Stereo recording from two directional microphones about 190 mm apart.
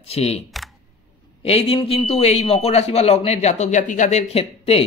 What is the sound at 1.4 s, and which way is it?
Speech, 30° left (ahead or behind).